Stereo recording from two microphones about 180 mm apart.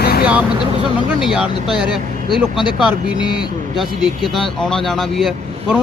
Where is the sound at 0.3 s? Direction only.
5° right (ahead or behind).